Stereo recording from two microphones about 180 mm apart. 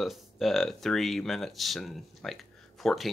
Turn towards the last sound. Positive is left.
turn(degrees=0)  # may be behind; listen again after turning